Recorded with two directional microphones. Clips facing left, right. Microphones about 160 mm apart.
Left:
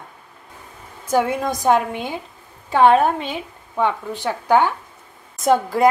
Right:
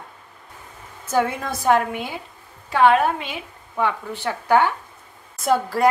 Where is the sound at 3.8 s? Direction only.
15° left (ahead or behind).